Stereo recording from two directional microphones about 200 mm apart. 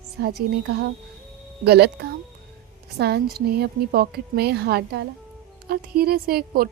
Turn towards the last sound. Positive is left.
turn(degrees=-50)  # may be behind; listen again after turning